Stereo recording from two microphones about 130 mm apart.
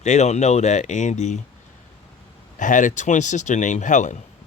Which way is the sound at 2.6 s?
80° left.